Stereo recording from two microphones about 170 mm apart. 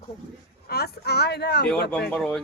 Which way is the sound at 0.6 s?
65° left (ahead or behind).